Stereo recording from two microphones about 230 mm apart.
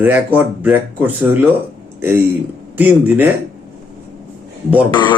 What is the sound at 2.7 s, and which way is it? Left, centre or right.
Speech, centre.